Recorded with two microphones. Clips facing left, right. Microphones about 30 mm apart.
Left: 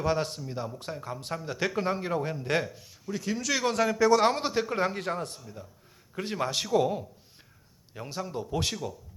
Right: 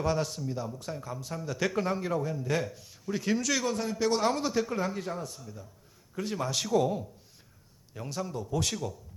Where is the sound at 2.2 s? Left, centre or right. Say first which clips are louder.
Left 2 dB; left.